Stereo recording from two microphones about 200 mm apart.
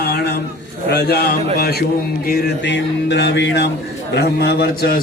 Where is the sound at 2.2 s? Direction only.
55° left (ahead or behind).